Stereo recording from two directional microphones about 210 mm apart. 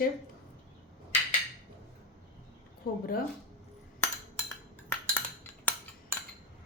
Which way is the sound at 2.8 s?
45° left (ahead or behind).